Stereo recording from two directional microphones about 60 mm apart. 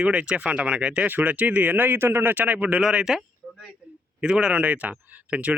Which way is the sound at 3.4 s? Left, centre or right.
Centre.